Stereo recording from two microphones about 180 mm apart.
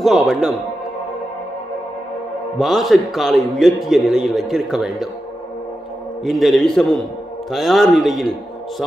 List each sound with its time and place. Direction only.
0.0 s a man's voice: centre (ahead or behind)
2.6 s a man's voice: centre (ahead or behind)
6.2 s a man's voice: centre (ahead or behind)